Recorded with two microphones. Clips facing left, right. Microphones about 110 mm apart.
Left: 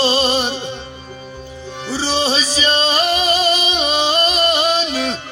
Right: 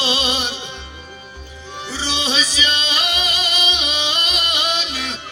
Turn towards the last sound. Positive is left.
turn(degrees=40)  # may be behind; listen again after turning